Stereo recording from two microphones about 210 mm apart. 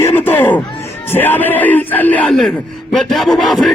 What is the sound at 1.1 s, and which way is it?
Speech, 10° left (ahead or behind).